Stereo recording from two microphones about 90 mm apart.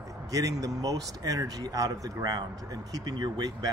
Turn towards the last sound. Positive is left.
turn(degrees=-50)  # may be behind; listen again after turning